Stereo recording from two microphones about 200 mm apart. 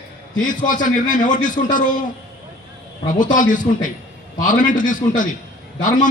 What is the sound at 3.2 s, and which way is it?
A man's voice, 40° left (ahead or behind).